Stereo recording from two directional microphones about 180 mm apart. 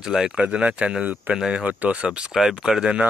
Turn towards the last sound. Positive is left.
turn(degrees=-5)  # may be behind; listen again after turning